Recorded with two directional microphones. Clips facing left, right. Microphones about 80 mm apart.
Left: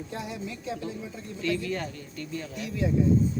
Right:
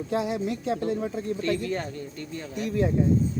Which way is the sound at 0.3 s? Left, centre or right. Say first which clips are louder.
Right 7 dB; right.